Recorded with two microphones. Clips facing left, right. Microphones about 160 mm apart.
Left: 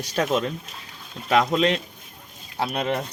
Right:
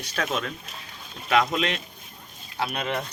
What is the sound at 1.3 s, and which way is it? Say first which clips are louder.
Speech: left 3 dB; 30° left (ahead or behind).